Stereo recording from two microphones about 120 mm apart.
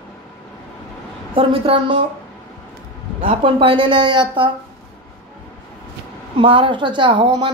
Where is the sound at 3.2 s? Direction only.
50° right (ahead or behind).